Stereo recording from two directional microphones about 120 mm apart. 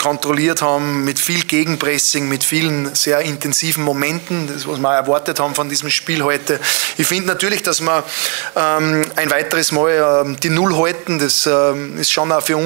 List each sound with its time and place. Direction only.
0.0 s speech: 20° right (ahead or behind)
5.0 s speech: 25° right (ahead or behind)
12.2 s speech: 25° right (ahead or behind)